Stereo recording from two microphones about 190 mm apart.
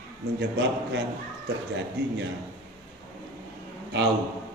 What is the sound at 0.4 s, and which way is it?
Speech, 70° right (ahead or behind).